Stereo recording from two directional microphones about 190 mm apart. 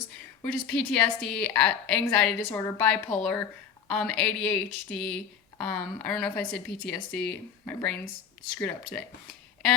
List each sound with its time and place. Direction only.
0.4 s a woman's voice: 5° left (ahead or behind)